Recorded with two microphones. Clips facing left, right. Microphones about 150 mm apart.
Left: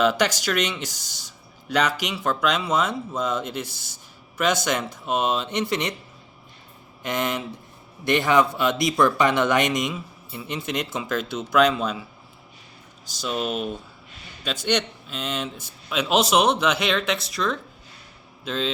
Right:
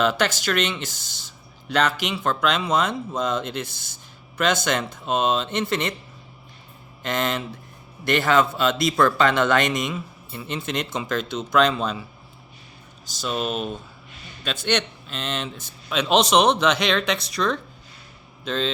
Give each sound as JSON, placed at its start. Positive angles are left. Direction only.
{"t": 0.0, "sound": "a man's voice", "side_deg": 10}
{"t": 7.0, "sound": "a man's voice", "side_deg": 15}
{"t": 13.4, "sound": "a man's voice", "side_deg": 10}